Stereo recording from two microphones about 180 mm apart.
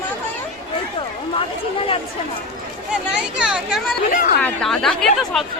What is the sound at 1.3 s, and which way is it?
Chatter, 30° left (ahead or behind).